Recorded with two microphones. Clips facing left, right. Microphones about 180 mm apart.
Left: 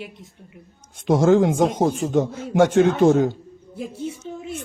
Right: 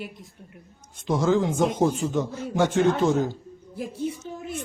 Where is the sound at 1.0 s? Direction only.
55° left (ahead or behind).